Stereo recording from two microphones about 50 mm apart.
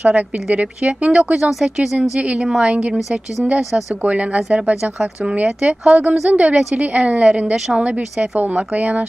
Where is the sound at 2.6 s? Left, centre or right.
Right.